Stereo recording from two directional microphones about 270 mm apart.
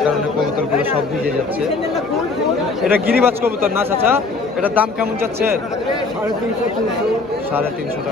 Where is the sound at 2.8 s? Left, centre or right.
Centre.